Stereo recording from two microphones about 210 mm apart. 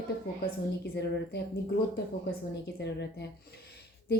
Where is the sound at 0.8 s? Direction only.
55° left (ahead or behind).